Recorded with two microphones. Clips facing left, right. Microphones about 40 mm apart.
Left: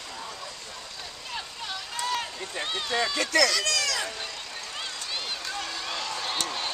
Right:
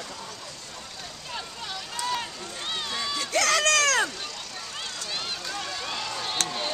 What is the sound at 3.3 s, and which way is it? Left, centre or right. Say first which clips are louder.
Speech: right 3 dB; right.